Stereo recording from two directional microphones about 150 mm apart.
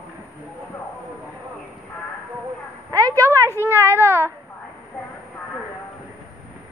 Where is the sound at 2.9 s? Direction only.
25° right (ahead or behind).